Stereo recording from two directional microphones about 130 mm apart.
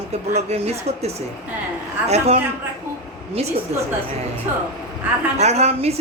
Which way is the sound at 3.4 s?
55° right (ahead or behind).